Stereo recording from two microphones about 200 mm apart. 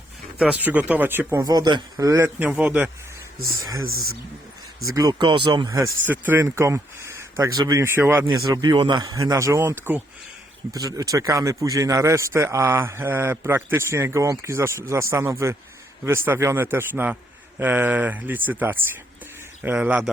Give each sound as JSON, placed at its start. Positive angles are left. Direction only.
{"t": 0.3, "sound": "speech", "side_deg": -5}
{"t": 3.6, "sound": "speech", "side_deg": -15}
{"t": 4.9, "sound": "speech", "side_deg": -20}